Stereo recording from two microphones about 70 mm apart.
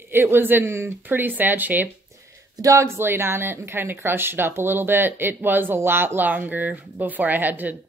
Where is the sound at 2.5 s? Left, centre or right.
Right.